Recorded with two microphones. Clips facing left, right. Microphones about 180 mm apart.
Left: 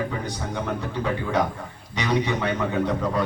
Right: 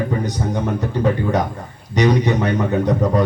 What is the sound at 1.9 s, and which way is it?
A man's voice, 40° right (ahead or behind).